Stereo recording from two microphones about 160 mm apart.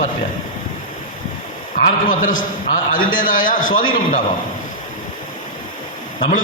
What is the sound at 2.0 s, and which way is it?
A man's voice, 55° left (ahead or behind).